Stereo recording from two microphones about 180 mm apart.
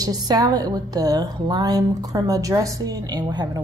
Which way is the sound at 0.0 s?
20° right (ahead or behind).